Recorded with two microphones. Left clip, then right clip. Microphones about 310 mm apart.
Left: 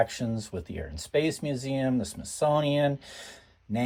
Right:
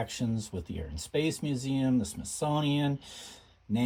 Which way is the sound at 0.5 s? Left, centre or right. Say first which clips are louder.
Left 4 dB; left.